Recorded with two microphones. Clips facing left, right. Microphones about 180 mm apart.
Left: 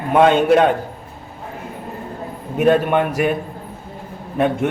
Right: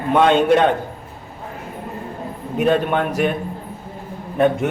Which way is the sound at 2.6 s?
5° left (ahead or behind).